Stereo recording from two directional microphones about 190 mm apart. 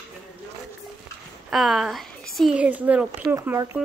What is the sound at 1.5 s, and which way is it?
Speech, centre (ahead or behind).